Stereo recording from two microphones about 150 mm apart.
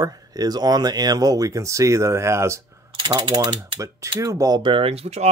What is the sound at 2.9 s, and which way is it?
Speech, 35° right (ahead or behind).